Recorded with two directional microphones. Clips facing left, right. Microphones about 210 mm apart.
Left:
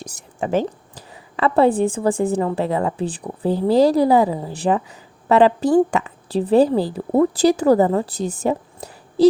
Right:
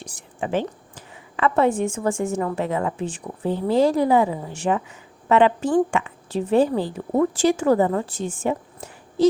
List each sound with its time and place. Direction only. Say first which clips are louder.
0.0 s a woman's voice: left 3 dB; 40° left (ahead or behind)